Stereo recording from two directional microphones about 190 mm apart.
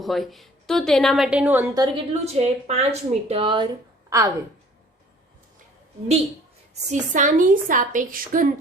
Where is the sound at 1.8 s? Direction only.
30° right (ahead or behind).